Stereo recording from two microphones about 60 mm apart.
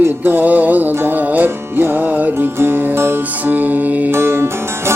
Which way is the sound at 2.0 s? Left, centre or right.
Right.